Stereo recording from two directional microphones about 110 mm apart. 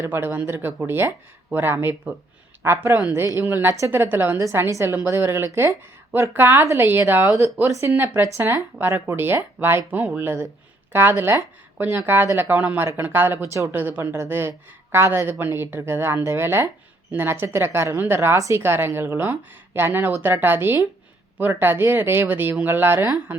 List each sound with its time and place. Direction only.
0.0 s a woman's voice: 20° right (ahead or behind)